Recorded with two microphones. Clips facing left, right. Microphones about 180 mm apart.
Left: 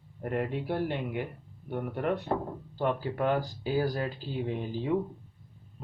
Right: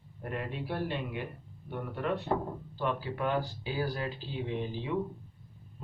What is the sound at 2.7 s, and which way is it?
Speech, 45° left (ahead or behind).